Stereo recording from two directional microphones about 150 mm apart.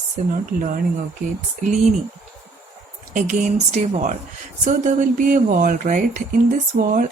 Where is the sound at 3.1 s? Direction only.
55° right (ahead or behind).